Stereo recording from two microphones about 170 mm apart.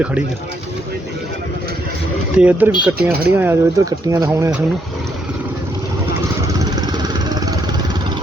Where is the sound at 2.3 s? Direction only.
10° right (ahead or behind).